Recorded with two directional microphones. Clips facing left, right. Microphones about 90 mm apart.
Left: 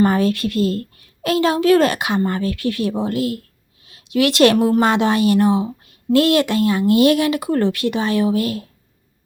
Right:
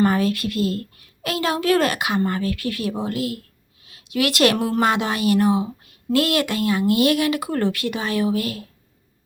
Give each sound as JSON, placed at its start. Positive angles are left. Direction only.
{"t": 0.0, "sound": "a woman's voice", "side_deg": 30}
{"t": 4.5, "sound": "speech", "side_deg": 15}
{"t": 4.8, "sound": "a woman's voice", "side_deg": 30}